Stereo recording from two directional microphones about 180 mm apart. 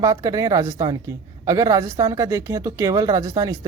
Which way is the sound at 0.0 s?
20° right (ahead or behind).